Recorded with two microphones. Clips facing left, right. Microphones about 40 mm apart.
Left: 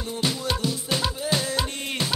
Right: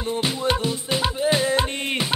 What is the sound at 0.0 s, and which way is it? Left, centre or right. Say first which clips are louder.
Music: right 4 dB; right.